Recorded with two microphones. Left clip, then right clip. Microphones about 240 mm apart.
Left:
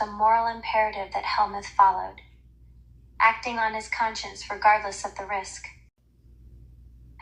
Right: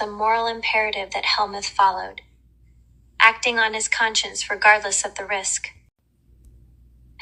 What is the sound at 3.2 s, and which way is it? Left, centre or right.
Speech, right.